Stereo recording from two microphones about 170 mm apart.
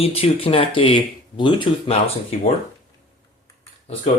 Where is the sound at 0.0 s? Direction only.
35° left (ahead or behind).